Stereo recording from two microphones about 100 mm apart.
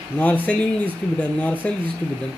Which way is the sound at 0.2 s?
15° left (ahead or behind).